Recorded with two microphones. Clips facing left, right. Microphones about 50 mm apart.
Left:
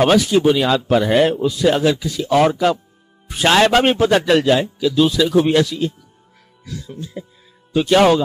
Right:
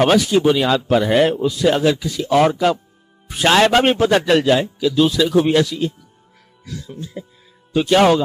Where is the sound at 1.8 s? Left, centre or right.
Right.